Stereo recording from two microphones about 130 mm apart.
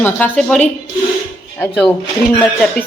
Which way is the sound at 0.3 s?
Centre (ahead or behind).